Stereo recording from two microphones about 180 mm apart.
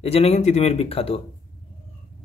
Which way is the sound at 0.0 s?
35° left (ahead or behind).